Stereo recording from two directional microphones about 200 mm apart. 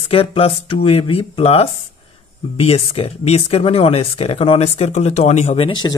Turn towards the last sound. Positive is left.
turn(degrees=25)  # may be behind; listen again after turning